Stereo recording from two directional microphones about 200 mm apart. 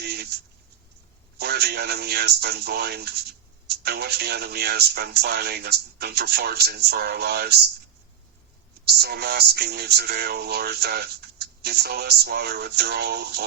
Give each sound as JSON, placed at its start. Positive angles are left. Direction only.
{"t": 0.0, "sound": "a sound", "side_deg": -55}
{"t": 1.4, "sound": "speech", "side_deg": -55}
{"t": 8.8, "sound": "speech", "side_deg": -55}